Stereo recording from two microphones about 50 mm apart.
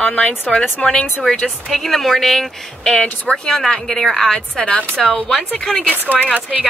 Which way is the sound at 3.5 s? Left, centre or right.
Centre.